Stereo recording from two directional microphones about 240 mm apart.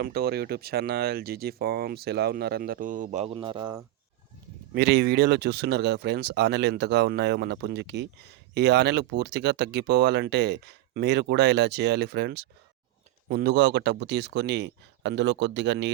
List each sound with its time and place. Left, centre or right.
0.0 s speech: right; by 3.8 s centre
4.7 s speech: right